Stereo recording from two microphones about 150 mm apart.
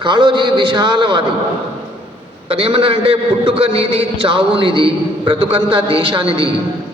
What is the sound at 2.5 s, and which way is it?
A man's voice, 35° right (ahead or behind).